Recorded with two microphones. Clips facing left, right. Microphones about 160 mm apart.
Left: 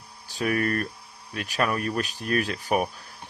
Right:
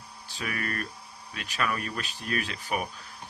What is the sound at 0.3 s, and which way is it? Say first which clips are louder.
Speech: left 9 dB; 50° left (ahead or behind).